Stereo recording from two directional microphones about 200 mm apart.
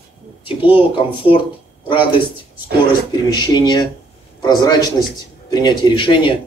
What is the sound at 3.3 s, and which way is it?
Speech, 20° left (ahead or behind).